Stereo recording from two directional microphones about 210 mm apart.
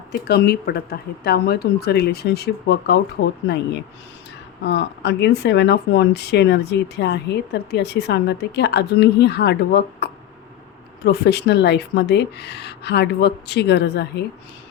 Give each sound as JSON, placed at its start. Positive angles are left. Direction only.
{"t": 0.1, "sound": "speech", "side_deg": 50}